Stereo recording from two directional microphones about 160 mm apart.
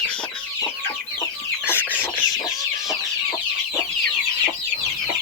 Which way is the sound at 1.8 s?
10° right (ahead or behind).